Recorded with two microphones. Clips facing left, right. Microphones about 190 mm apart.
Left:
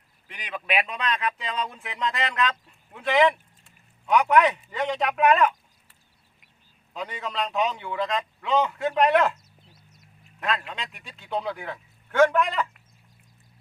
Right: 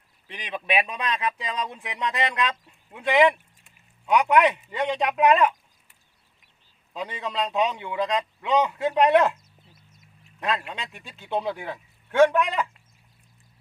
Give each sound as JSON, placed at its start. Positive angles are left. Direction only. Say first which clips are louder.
{"t": 0.3, "sound": "a man's voice", "louder": "right 2 dB", "side_deg": -20}
{"t": 7.0, "sound": "a man's voice", "louder": "right 1 dB", "side_deg": -20}
{"t": 9.7, "sound": "a sound", "louder": "left 1 dB", "side_deg": -50}
{"t": 10.7, "sound": "a man's voice", "louder": "right 1 dB", "side_deg": -20}